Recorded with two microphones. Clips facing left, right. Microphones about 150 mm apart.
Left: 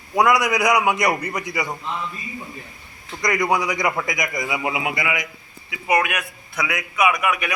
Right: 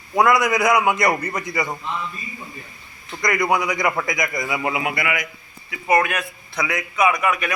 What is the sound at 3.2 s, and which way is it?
A man's voice, 20° left (ahead or behind).